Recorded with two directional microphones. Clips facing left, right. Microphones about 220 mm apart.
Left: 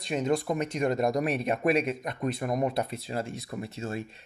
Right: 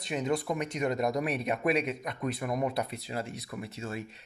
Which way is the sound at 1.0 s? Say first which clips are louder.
Left 3 dB; 45° left (ahead or behind).